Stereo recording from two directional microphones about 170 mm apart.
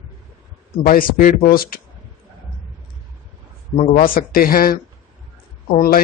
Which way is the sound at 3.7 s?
45° left (ahead or behind).